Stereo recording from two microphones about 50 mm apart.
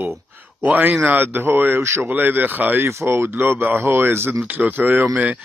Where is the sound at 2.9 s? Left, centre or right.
Right.